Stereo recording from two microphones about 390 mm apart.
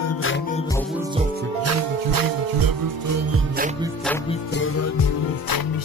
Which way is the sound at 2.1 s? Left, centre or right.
Right.